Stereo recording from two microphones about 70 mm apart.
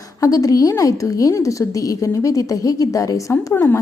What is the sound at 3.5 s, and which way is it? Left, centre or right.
Speech, left.